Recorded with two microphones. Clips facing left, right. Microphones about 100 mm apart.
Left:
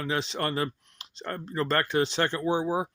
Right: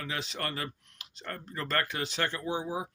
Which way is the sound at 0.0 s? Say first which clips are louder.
Left 7 dB; 30° left (ahead or behind).